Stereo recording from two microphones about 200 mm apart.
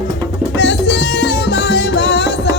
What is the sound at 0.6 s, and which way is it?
Music, 65° left (ahead or behind).